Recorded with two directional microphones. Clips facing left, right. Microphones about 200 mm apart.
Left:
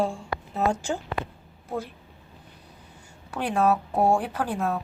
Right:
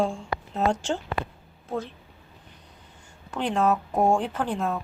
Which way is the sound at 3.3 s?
10° left (ahead or behind).